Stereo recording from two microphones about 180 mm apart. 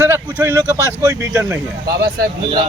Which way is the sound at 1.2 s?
5° right (ahead or behind).